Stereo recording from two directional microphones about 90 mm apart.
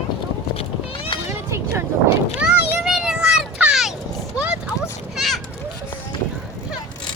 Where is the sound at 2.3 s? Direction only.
10° right (ahead or behind).